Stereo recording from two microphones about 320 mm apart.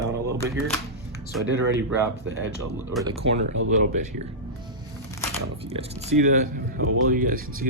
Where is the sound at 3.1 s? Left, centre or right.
Centre.